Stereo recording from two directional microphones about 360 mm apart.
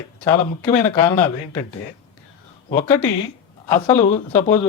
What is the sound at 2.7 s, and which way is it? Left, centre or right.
Speech, centre.